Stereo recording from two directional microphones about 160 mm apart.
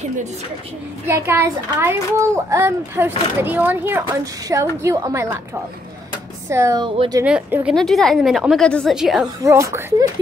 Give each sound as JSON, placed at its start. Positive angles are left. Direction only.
{"t": 1.0, "sound": "a child's voice", "side_deg": -15}
{"t": 6.5, "sound": "a woman's voice", "side_deg": -20}
{"t": 7.2, "sound": "a woman's voice", "side_deg": -5}
{"t": 9.4, "sound": "a child's voice", "side_deg": -20}